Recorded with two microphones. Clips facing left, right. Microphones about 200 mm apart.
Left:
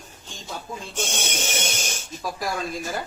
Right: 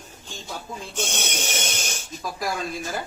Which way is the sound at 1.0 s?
10° left (ahead or behind).